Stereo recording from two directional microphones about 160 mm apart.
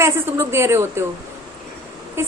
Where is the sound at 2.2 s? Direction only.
15° right (ahead or behind).